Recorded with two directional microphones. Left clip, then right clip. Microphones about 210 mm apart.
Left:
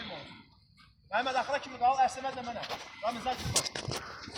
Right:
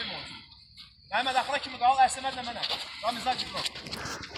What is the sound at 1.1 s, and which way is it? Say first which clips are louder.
A man's voice: right 3 dB; 45° left (ahead or behind).